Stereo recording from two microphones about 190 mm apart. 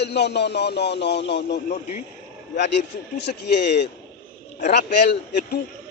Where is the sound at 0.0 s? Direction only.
60° left (ahead or behind).